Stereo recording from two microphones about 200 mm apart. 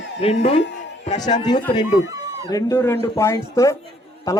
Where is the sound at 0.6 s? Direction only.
60° left (ahead or behind).